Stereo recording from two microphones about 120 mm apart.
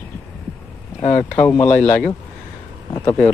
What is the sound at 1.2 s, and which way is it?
Speech, 15° left (ahead or behind).